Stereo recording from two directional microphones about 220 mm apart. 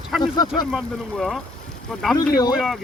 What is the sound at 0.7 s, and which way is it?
Speech, centre (ahead or behind).